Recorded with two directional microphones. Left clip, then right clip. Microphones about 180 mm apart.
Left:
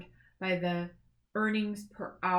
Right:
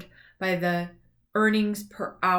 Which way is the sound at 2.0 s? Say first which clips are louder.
Right 6 dB; 20° right (ahead or behind).